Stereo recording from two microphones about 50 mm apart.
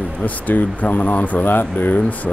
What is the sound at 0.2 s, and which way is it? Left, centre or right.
A man's voice, left.